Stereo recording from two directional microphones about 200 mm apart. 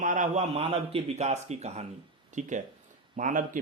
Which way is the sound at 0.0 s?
40° right (ahead or behind).